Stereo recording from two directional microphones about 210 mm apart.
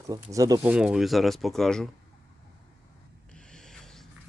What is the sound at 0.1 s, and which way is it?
Speech, 15° right (ahead or behind).